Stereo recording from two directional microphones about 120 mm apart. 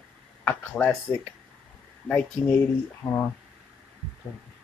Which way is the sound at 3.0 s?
20° left (ahead or behind).